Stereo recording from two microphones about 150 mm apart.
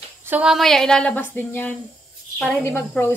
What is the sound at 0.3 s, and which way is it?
Speech, 5° right (ahead or behind).